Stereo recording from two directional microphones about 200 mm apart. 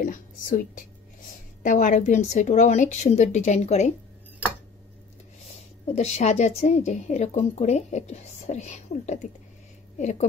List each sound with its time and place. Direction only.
0.0 s a woman's voice: 40° left (ahead or behind)
5.9 s a woman's voice: 35° left (ahead or behind)